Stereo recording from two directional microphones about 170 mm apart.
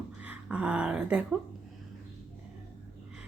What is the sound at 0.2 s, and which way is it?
Speech, 5° right (ahead or behind).